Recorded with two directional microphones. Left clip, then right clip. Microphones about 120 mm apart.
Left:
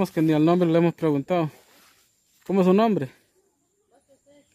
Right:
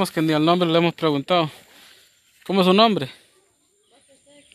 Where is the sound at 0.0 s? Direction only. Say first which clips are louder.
Right 1 dB; 25° left (ahead or behind).